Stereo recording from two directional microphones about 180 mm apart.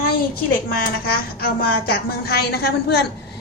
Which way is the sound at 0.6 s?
55° left (ahead or behind).